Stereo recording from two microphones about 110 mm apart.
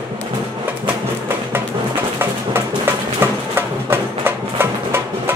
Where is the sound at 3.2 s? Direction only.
20° right (ahead or behind).